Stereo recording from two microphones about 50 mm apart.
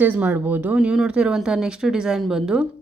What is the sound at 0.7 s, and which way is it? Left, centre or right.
Speech, centre.